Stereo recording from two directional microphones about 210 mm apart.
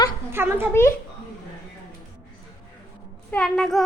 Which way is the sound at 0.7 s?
10° left (ahead or behind).